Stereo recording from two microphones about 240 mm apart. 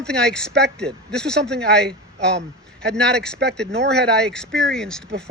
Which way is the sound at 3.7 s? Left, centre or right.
Right.